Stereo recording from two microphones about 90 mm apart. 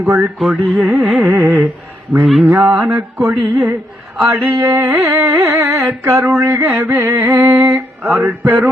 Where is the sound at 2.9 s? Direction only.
20° right (ahead or behind).